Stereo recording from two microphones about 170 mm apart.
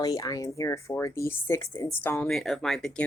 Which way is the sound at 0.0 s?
20° left (ahead or behind).